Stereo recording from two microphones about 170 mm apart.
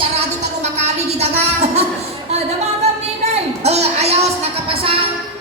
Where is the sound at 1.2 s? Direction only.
40° right (ahead or behind).